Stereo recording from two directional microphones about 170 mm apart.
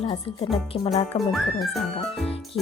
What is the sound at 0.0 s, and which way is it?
Speech, 30° left (ahead or behind).